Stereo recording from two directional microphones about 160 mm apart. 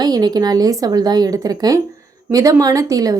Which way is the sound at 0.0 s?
25° right (ahead or behind).